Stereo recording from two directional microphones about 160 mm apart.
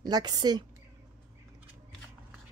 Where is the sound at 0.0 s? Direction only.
25° right (ahead or behind).